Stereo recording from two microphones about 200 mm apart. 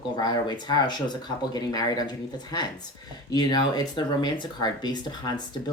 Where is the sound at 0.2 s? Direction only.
20° left (ahead or behind).